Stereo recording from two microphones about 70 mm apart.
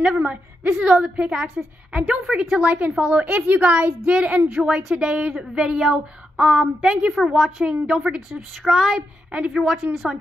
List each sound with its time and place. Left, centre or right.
0.0 s a woman's voice: centre
2.5 s a woman's voice: centre